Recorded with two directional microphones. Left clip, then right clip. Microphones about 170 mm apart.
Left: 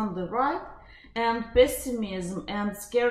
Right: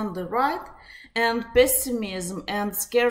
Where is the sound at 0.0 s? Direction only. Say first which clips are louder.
Right 3 dB; 20° right (ahead or behind).